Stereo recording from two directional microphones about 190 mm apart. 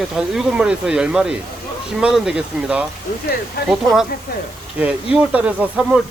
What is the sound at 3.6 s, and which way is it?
Speech, 55° left (ahead or behind).